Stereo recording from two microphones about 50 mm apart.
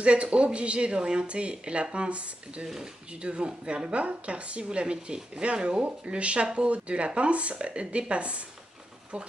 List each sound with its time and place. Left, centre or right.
0.0 s a woman's voice: right
2.6 s speech: centre
3.1 s a woman's voice: right